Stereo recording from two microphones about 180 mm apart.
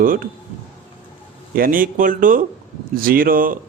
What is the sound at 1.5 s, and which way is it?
A man's voice, 50° right (ahead or behind).